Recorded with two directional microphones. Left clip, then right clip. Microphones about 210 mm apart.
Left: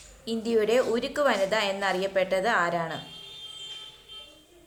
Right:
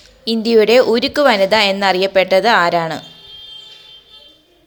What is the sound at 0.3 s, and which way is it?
A woman's voice, 35° right (ahead or behind).